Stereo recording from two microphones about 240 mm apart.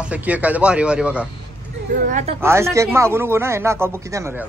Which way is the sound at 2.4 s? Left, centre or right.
Centre.